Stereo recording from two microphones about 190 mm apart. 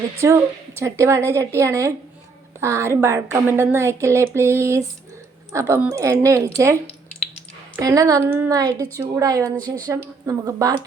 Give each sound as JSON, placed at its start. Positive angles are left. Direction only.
{"t": 0.2, "sound": "a woman's voice", "side_deg": -15}
{"t": 7.8, "sound": "a woman's voice", "side_deg": -15}
{"t": 9.6, "sound": "a woman's voice", "side_deg": 10}
{"t": 10.2, "sound": "speech", "side_deg": -20}